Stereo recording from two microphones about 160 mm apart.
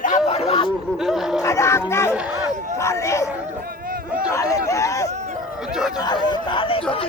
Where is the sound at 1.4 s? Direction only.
20° left (ahead or behind).